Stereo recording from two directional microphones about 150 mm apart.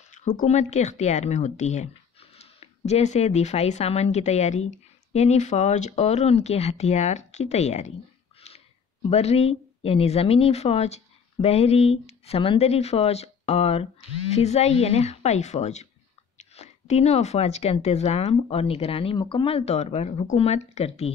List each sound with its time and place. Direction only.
0.4 s a woman's voice: 50° left (ahead or behind)
8.4 s a sound: 45° left (ahead or behind)
9.1 s a woman's voice: 45° left (ahead or behind)